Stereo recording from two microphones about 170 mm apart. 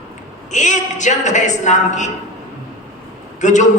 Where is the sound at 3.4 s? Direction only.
45° left (ahead or behind).